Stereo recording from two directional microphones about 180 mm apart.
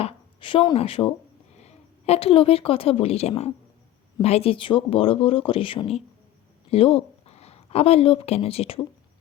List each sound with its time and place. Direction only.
0.0 s a woman's voice: 30° left (ahead or behind)